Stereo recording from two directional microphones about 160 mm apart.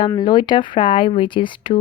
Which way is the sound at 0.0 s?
25° left (ahead or behind).